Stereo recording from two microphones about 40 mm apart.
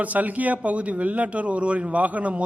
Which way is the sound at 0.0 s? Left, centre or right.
Right.